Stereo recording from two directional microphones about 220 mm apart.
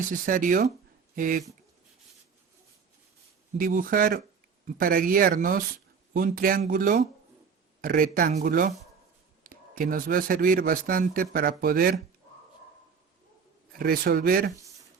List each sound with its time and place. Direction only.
0.1 s speech: 35° right (ahead or behind)
3.6 s speech: 40° right (ahead or behind)
13.7 s speech: 45° right (ahead or behind)